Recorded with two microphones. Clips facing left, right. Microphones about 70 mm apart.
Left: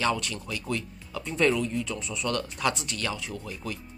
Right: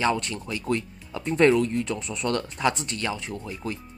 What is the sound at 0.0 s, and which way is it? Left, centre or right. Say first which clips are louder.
Speech: right 3 dB; right.